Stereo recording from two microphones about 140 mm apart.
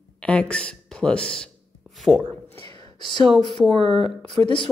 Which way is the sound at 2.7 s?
35° left (ahead or behind).